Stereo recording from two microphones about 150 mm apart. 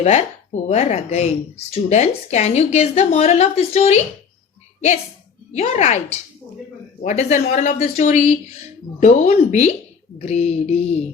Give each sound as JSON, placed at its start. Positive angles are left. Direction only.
{"t": 0.0, "sound": "speech", "side_deg": 50}
{"t": 5.5, "sound": "speech", "side_deg": 50}